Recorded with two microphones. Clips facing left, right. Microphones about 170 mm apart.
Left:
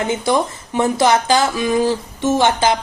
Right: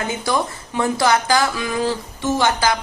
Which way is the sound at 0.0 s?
20° left (ahead or behind).